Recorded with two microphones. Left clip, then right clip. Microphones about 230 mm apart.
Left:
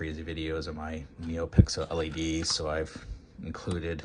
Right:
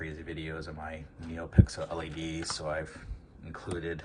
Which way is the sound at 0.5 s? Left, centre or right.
Left.